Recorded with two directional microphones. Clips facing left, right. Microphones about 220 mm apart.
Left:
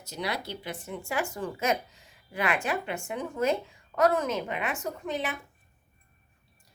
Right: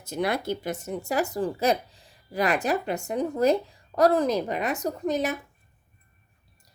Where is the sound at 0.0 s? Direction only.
50° right (ahead or behind).